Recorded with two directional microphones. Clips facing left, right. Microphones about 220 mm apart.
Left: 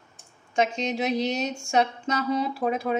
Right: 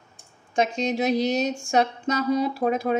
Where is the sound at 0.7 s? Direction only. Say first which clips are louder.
Right 3 dB; 35° right (ahead or behind).